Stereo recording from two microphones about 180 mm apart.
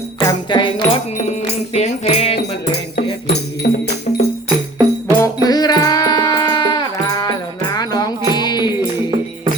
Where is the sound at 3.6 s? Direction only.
55° left (ahead or behind).